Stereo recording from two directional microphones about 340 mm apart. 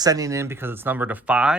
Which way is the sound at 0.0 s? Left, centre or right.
Centre.